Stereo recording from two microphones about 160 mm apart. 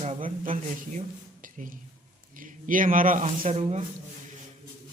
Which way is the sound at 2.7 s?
55° right (ahead or behind).